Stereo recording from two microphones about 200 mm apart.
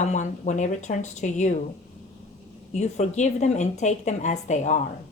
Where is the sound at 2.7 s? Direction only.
35° left (ahead or behind).